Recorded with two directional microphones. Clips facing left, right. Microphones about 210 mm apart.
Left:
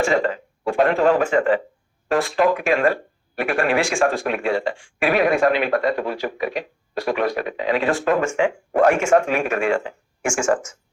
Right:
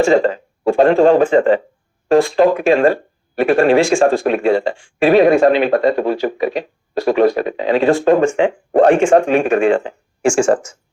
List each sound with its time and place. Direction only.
0.1 s speech: 30° right (ahead or behind)